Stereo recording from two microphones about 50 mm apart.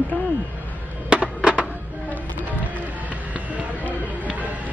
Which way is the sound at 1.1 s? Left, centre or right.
Right.